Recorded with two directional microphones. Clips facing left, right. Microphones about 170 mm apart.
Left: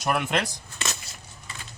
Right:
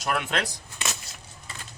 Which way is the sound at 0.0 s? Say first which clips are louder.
Left 2 dB; 10° left (ahead or behind).